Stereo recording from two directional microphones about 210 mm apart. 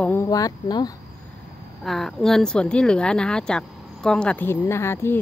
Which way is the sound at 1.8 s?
Centre (ahead or behind).